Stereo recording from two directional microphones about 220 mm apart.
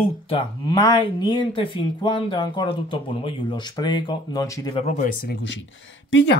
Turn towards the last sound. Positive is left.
turn(degrees=55)  # may be behind; listen again after turning